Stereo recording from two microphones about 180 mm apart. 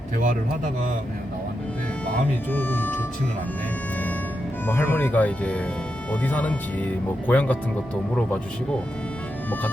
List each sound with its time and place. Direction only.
0.2 s a man's voice: 45° right (ahead or behind)
2.5 s speech: 10° left (ahead or behind)
4.6 s speech: 10° left (ahead or behind)